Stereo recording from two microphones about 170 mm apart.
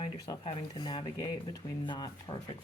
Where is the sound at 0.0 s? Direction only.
25° left (ahead or behind).